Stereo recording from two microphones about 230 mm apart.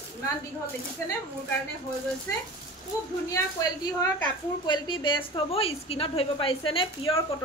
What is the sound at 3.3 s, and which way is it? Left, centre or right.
A woman's voice, centre.